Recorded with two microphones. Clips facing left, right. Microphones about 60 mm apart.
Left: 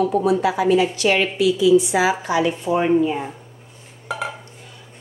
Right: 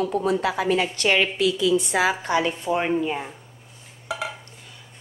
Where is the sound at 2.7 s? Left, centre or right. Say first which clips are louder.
Left 3 dB; centre.